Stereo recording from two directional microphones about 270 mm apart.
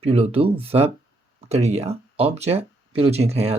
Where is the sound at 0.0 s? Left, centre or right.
Right.